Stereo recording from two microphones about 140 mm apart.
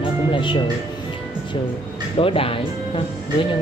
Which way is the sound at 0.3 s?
35° left (ahead or behind).